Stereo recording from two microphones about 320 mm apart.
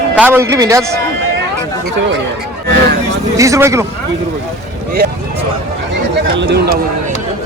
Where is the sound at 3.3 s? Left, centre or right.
Centre.